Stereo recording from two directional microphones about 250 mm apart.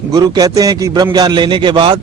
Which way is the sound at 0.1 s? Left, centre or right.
Centre.